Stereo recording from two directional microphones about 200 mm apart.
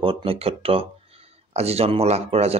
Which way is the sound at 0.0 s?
30° right (ahead or behind).